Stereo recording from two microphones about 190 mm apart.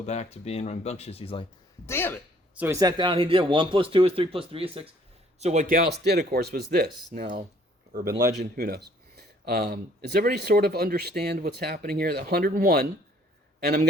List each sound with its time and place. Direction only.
0.0 s speech: 35° left (ahead or behind)
1.9 s speech: 10° left (ahead or behind)
2.6 s speech: 15° right (ahead or behind); by 12.9 s 55° right (ahead or behind)